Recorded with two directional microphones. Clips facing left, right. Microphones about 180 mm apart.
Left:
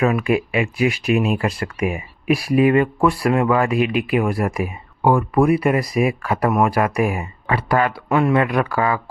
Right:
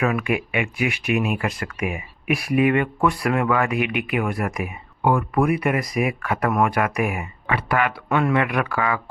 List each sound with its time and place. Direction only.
0.0 s speech: 30° left (ahead or behind)